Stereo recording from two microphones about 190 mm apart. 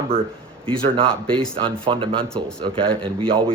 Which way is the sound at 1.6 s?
25° right (ahead or behind).